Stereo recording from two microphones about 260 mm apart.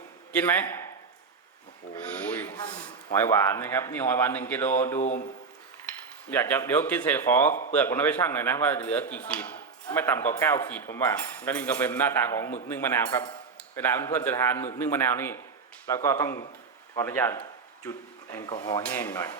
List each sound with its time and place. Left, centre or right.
0.3 s speech: centre
2.1 s speech: centre
4.9 s speech: left
6.3 s speech: centre